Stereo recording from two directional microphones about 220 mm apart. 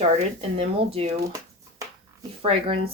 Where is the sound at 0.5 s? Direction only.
25° right (ahead or behind).